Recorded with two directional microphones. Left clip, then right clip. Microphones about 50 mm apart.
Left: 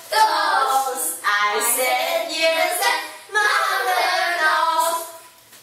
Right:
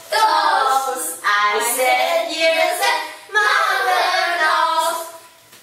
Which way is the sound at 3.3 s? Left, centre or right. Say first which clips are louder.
Right 3 dB; centre.